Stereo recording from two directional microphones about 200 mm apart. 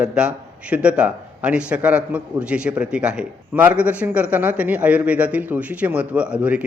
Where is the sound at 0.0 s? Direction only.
5° right (ahead or behind).